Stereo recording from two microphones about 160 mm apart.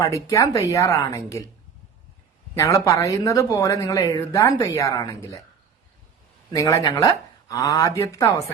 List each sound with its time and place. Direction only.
0.0 s speech: 20° left (ahead or behind)
2.6 s speech: 20° left (ahead or behind)
6.5 s speech: 20° left (ahead or behind)